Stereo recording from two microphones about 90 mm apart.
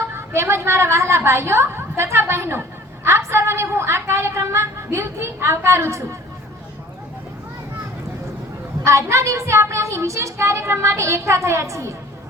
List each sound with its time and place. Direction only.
0.0 s a woman's voice: 30° right (ahead or behind)
8.8 s a woman's voice: 35° right (ahead or behind)